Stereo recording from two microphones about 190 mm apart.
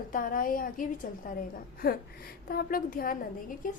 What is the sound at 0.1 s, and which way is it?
A woman's voice, 45° left (ahead or behind).